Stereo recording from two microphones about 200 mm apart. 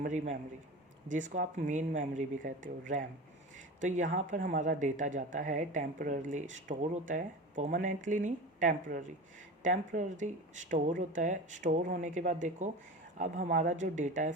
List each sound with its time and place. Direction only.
0.0 s speech: 40° right (ahead or behind)